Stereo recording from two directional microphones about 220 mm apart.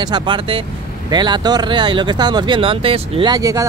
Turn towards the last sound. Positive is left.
turn(degrees=-15)  # may be behind; listen again after turning